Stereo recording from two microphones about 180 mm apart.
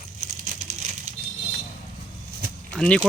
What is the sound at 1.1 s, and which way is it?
Vehicle, 40° right (ahead or behind).